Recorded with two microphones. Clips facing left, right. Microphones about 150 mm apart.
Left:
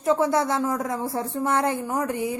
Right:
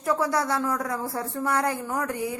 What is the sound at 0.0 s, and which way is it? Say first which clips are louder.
Speech: left 4 dB; 20° left (ahead or behind).